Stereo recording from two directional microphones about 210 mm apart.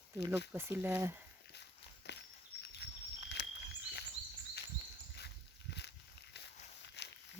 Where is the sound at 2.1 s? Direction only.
55° left (ahead or behind).